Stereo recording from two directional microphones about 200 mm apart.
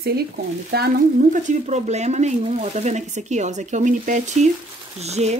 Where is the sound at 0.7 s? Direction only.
50° right (ahead or behind).